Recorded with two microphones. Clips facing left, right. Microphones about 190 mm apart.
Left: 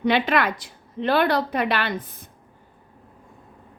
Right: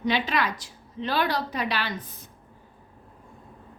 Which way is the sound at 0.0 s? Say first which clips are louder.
Left 5 dB; 60° left (ahead or behind).